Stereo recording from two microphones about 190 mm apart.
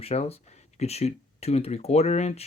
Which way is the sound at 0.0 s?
35° left (ahead or behind).